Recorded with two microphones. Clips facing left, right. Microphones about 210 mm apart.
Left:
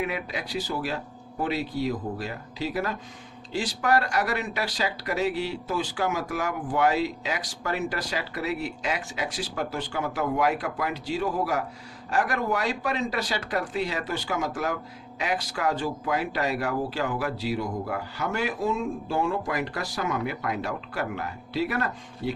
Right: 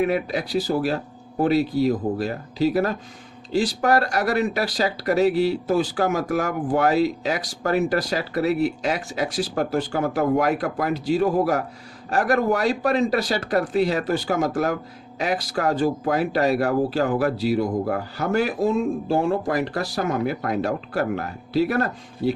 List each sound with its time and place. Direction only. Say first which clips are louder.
0.0 s speech: right 8 dB; 40° right (ahead or behind)